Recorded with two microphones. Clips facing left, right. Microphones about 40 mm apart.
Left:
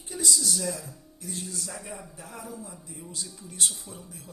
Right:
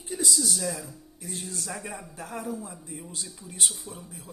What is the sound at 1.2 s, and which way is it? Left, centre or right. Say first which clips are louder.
Speech: even; right.